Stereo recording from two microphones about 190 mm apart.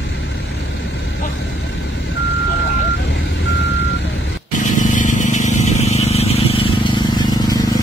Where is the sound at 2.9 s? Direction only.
75° left (ahead or behind).